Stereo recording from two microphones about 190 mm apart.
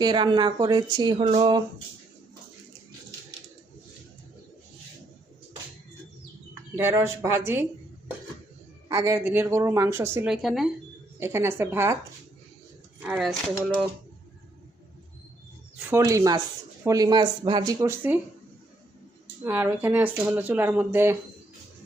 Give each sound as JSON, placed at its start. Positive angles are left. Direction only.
{"t": 0.0, "sound": "speech", "side_deg": -25}
{"t": 6.5, "sound": "a woman's voice", "side_deg": -15}
{"t": 11.2, "sound": "a woman's voice", "side_deg": -15}
{"t": 13.0, "sound": "speech", "side_deg": -5}
{"t": 15.9, "sound": "a woman's voice", "side_deg": -15}
{"t": 19.5, "sound": "a woman's voice", "side_deg": -10}